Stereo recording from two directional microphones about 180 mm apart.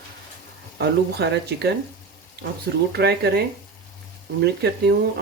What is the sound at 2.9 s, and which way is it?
Speech, 65° right (ahead or behind).